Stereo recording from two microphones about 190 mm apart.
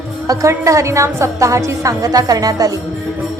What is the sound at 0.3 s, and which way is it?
A woman's voice, 15° right (ahead or behind).